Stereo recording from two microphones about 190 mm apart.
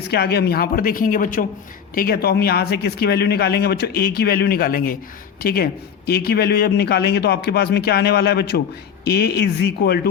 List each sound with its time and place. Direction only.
0.1 s speech: 60° left (ahead or behind)